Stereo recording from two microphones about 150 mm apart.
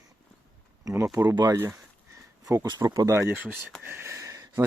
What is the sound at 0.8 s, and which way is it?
Speech, 20° right (ahead or behind).